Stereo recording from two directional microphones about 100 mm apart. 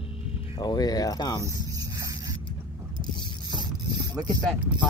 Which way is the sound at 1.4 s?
35° right (ahead or behind).